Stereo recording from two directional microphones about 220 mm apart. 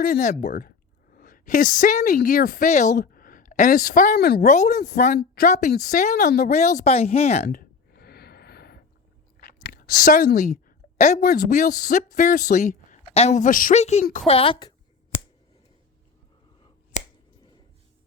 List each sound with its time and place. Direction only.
0.0 s speech: 35° left (ahead or behind)
4.4 s speech: 35° left (ahead or behind)
4.7 s speech: 45° left (ahead or behind); by 7.4 s 30° left (ahead or behind)
7.4 s a sound: 45° left (ahead or behind)
9.4 s a woman's voice: 40° left (ahead or behind); by 14.7 s 25° left (ahead or behind)
16.9 s finger snapping: 30° left (ahead or behind)